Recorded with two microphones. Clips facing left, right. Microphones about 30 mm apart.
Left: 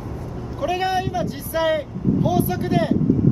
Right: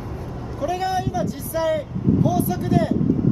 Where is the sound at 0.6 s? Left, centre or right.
Left.